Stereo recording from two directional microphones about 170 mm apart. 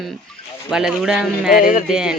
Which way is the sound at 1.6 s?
55° left (ahead or behind).